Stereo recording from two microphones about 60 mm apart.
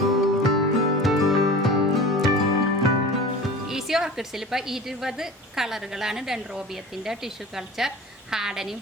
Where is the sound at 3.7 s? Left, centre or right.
Centre.